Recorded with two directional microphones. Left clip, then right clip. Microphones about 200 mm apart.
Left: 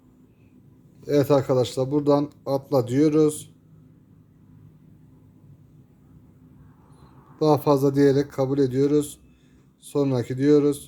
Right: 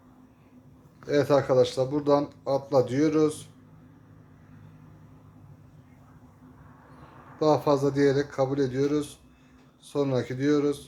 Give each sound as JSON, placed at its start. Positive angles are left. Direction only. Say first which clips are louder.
{"t": 1.0, "sound": "speech", "louder": "left 3 dB", "side_deg": 45}
{"t": 7.3, "sound": "speech", "louder": "left 3 dB", "side_deg": 45}